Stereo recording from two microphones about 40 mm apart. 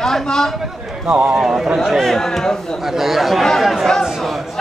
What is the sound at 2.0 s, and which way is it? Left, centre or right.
Speech, centre.